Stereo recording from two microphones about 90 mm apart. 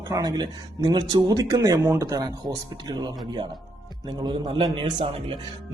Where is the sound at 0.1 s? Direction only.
50° right (ahead or behind).